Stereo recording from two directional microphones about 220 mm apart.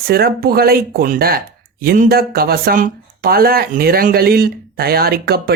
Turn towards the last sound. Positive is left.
turn(degrees=-45)  # may be behind; listen again after turning